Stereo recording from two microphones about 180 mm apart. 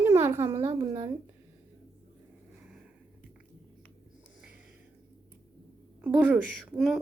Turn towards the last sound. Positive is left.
turn(degrees=0)  # may be behind; listen again after turning